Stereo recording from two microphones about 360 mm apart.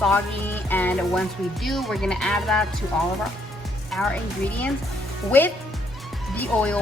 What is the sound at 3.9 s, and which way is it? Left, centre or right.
Speech, centre.